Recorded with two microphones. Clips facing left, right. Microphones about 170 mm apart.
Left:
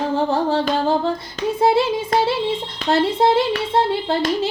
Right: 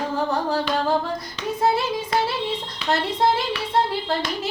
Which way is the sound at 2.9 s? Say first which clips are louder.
Left 5 dB; 25° left (ahead or behind).